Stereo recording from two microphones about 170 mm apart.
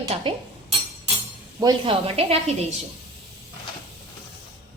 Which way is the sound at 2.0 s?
35° right (ahead or behind).